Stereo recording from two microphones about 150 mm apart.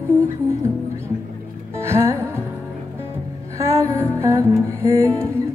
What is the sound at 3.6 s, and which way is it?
Music, 20° right (ahead or behind).